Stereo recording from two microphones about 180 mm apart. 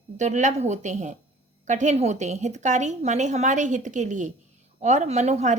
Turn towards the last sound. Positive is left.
turn(degrees=-40)  # may be behind; listen again after turning